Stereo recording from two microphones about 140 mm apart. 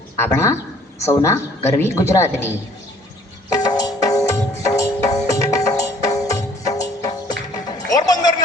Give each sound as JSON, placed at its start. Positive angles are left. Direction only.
{"t": 0.2, "sound": "a woman's voice", "side_deg": 20}
{"t": 3.5, "sound": "music", "side_deg": 25}